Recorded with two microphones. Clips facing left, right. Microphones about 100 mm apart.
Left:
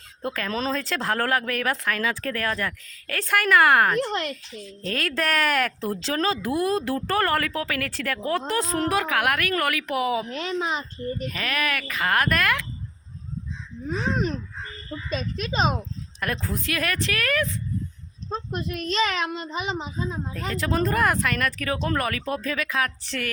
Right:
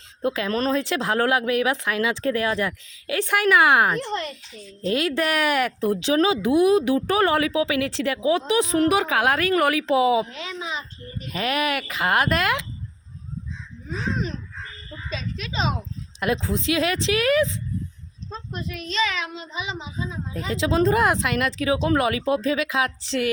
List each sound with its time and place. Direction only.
0.5 s speech: 5° right (ahead or behind)
4.0 s speech: 75° left (ahead or behind)
4.8 s speech: 10° right (ahead or behind)
10.2 s a child's voice: 55° left (ahead or behind)
11.3 s speech: 25° right (ahead or behind)
13.8 s a child's voice: 55° left (ahead or behind)
16.2 s speech: 15° right (ahead or behind)
18.3 s a child's voice: 50° left (ahead or behind)
20.5 s speech: 15° right (ahead or behind)